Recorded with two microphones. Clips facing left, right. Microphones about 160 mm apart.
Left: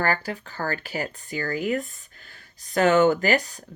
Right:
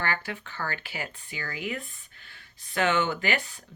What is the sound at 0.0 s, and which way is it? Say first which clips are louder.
Speech: left 6 dB; 40° left (ahead or behind).